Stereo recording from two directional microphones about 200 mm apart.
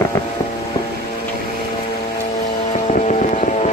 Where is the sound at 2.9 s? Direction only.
35° left (ahead or behind).